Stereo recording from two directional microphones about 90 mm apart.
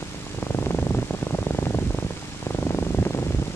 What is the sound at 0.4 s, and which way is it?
Purr, 25° left (ahead or behind).